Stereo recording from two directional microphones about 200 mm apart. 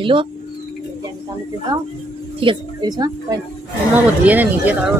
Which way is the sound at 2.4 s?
25° right (ahead or behind).